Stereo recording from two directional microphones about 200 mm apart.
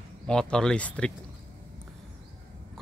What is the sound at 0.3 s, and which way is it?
Speech, 5° left (ahead or behind).